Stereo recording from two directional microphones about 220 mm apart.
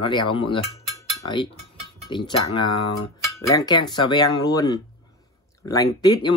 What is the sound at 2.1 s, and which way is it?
Speech, 20° left (ahead or behind).